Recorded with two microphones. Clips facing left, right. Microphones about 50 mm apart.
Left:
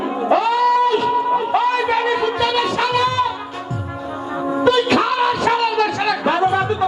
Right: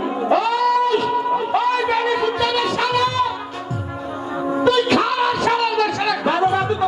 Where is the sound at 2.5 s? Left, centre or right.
Centre.